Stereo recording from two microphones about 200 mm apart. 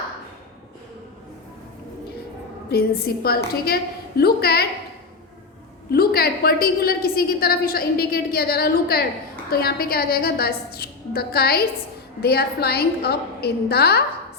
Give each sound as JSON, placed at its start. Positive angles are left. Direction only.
{"t": 2.6, "sound": "a woman's voice", "side_deg": 50}
{"t": 5.9, "sound": "a woman's voice", "side_deg": 50}